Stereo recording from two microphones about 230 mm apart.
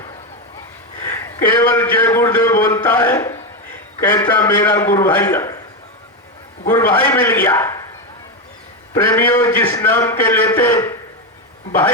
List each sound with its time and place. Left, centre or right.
1.0 s a man's voice: centre
6.7 s a man's voice: centre
9.0 s a man's voice: centre